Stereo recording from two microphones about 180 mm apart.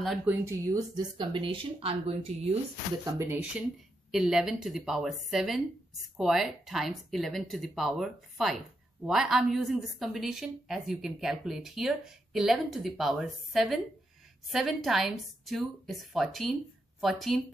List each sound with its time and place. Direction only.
0.0 s speech: 5° right (ahead or behind)
0.7 s speech: 25° right (ahead or behind)
3.2 s speech: 15° right (ahead or behind)